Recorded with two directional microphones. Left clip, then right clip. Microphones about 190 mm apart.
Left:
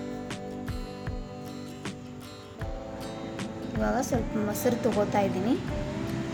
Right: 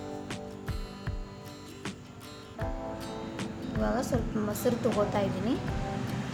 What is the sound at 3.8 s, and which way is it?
Speech, 10° left (ahead or behind).